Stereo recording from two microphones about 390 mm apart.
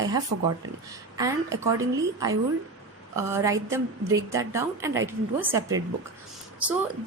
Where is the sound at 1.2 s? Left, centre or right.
Centre.